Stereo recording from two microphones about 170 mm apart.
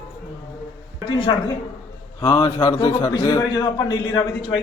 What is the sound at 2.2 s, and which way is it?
A man's voice, 25° left (ahead or behind).